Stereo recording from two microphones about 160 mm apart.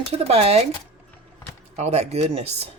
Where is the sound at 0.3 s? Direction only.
40° right (ahead or behind).